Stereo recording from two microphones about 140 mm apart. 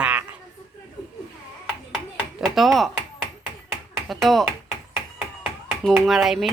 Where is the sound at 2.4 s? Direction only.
Centre (ahead or behind).